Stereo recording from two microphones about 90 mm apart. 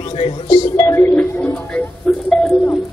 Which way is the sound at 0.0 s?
90° left.